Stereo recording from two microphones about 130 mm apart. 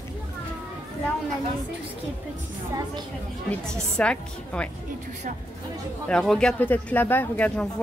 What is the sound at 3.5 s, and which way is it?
Speech, 5° left (ahead or behind).